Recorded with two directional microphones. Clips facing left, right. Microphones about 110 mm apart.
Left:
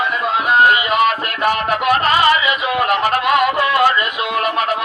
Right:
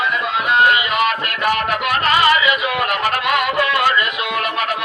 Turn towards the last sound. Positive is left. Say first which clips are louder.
# left 3 dB
turn(degrees=30)  # may be behind; listen again after turning